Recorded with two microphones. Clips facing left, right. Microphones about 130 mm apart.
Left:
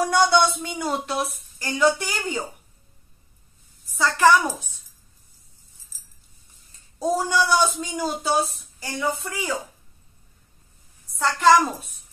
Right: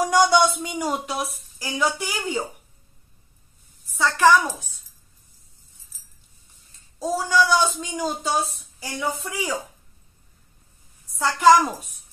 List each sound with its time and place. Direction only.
0.0 s speech: 15° right (ahead or behind)
3.9 s speech: centre (ahead or behind)
4.4 s speech: 20° left (ahead or behind)
7.0 s speech: 15° left (ahead or behind); by 9.6 s 5° right (ahead or behind)
11.1 s speech: 5° right (ahead or behind)